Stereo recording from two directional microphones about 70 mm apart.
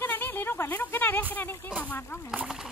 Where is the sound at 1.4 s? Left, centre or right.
Left.